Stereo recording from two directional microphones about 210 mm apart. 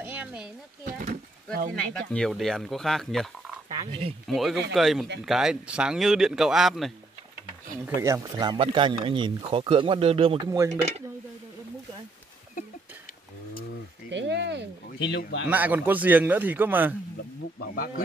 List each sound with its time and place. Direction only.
0.0 s a sound: 5° right (ahead or behind)
0.9 s a sound: 40° right (ahead or behind)
1.8 s speech: 5° left (ahead or behind)
3.6 s speech: 25° right (ahead or behind)
4.3 s speech: centre (ahead or behind)
7.8 s speech: 15° right (ahead or behind)
14.1 s a sound: 55° right (ahead or behind)
14.9 s speech: 55° left (ahead or behind)
15.4 s a man's voice: 10° right (ahead or behind)
17.6 s speech: 45° left (ahead or behind)